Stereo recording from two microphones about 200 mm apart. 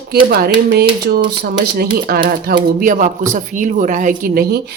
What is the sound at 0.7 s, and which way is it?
Speech, 50° right (ahead or behind).